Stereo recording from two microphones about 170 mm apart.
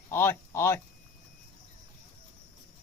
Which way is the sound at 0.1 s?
15° left (ahead or behind).